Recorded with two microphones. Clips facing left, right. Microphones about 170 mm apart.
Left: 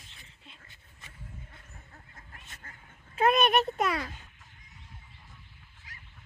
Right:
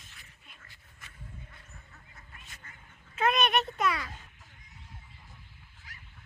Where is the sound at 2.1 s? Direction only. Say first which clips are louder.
Even; 50° left (ahead or behind).